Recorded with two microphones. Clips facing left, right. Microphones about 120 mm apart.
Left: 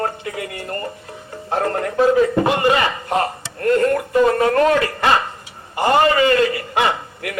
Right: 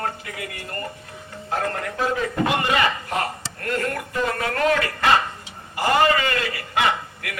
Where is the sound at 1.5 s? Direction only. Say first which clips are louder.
Left 5 dB; 35° left (ahead or behind).